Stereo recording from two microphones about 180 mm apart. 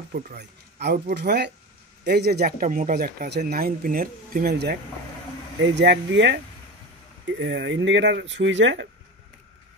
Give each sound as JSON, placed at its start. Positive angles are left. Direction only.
{"t": 0.1, "sound": "speech", "side_deg": -65}
{"t": 5.6, "sound": "speech", "side_deg": -75}
{"t": 7.2, "sound": "speech", "side_deg": -90}